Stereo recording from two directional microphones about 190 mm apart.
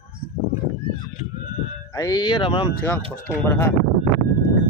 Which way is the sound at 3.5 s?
15° left (ahead or behind).